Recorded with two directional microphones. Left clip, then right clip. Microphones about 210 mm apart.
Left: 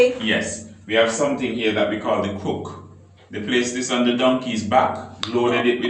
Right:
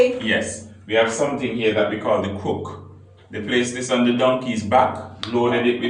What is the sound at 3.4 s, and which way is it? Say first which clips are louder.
A man's voice: even; 25° right (ahead or behind).